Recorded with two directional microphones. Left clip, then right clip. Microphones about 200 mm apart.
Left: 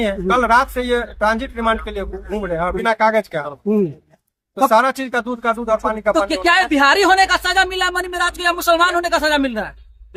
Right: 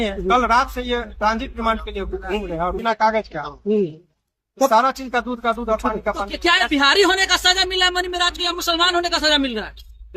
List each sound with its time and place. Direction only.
0.0 s speech: 15° left (ahead or behind)
4.7 s speech: 10° left (ahead or behind)
6.3 s speech: 50° left (ahead or behind)